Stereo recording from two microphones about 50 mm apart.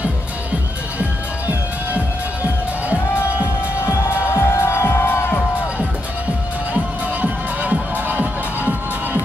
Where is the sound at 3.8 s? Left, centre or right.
Left.